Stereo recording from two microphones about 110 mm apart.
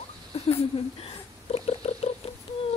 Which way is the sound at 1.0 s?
60° left (ahead or behind).